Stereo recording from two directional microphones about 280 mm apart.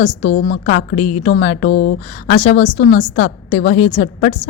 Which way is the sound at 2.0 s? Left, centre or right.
Left.